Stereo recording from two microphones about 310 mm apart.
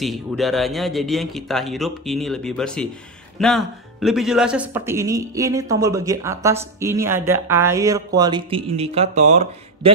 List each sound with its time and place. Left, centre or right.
0.0 s speech: centre; by 9.4 s right